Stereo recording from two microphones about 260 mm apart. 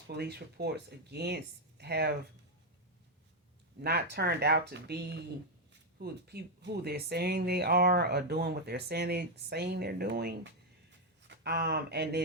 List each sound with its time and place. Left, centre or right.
0.1 s speech: right
3.8 s speech: right